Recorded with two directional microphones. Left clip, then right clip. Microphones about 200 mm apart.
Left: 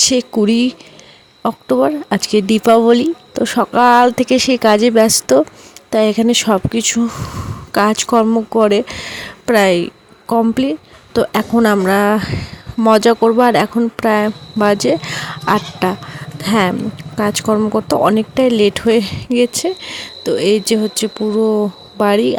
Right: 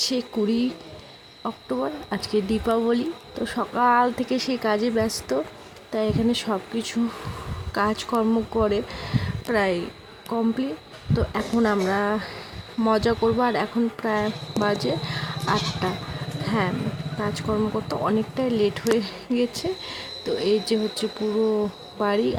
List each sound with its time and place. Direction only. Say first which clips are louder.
0.0 s speech: left 11 dB; 40° left (ahead or behind)